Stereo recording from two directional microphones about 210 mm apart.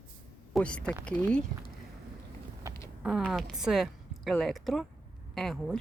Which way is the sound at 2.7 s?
15° right (ahead or behind).